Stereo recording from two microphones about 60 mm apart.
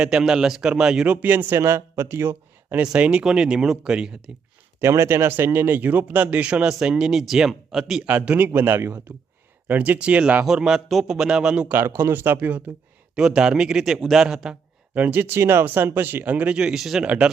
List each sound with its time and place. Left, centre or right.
0.0 s a man's voice: centre
1.2 s speech: right
2.7 s a man's voice: centre
4.8 s speech: right; by 8.1 s centre
8.1 s speech: right
8.5 s speech: right
9.6 s speech: right
10.4 s a man's voice: centre
11.7 s speech: right
13.1 s a man's voice: centre
14.9 s speech: right
15.4 s a man's voice: right; by 17.3 s centre